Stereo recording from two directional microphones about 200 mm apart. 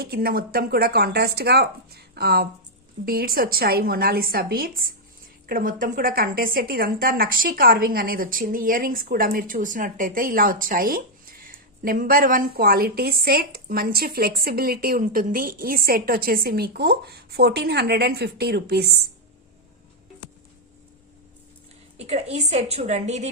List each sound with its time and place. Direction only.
0.0 s a woman's voice: 50° right (ahead or behind)
21.9 s a woman's voice: 30° right (ahead or behind)